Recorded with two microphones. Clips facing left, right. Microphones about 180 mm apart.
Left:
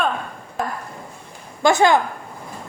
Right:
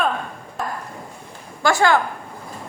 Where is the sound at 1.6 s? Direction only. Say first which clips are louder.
Left 2 dB; 20° left (ahead or behind).